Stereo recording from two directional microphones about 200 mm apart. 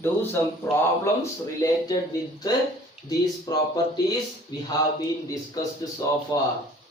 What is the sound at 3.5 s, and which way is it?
Speech, 20° left (ahead or behind).